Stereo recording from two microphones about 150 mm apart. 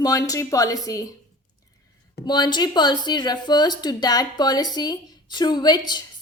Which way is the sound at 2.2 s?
30° left (ahead or behind).